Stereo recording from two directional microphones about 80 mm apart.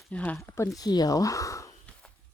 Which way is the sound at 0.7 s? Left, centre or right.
Left.